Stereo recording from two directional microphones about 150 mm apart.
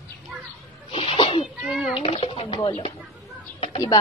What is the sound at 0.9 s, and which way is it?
Sneeze, 35° left (ahead or behind).